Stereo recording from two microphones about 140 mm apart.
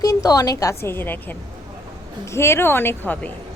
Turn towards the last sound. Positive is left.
turn(degrees=15)  # may be behind; listen again after turning